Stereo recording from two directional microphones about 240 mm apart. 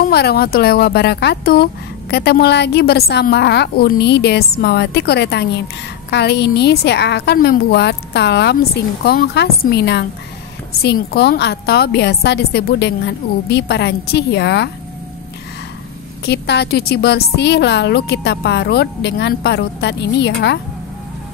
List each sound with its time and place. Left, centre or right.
0.0 s speech: left
16.3 s speech: left